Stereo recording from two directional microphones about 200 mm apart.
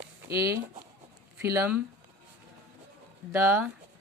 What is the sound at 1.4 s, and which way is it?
Speech, 10° right (ahead or behind).